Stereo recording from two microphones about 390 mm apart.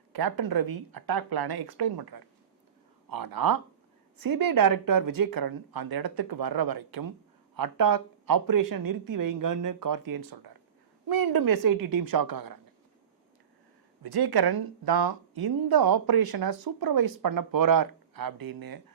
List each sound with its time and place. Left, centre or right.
0.1 s speech: right
3.1 s speech: right
14.0 s speech: right